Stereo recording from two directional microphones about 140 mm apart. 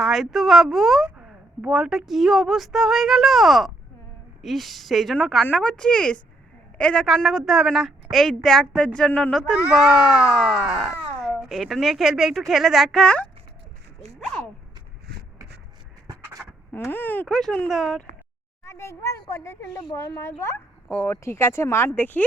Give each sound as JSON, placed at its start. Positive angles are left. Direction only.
{"t": 0.0, "sound": "a woman's voice", "side_deg": 0}
{"t": 9.7, "sound": "a woman's voice", "side_deg": -5}
{"t": 16.7, "sound": "speech", "side_deg": 15}
{"t": 17.2, "sound": "a woman's voice", "side_deg": 5}
{"t": 18.6, "sound": "speech", "side_deg": 20}